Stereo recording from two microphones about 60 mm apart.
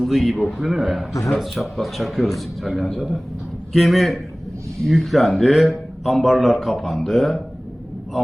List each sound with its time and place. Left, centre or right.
0.0 s a man's voice: centre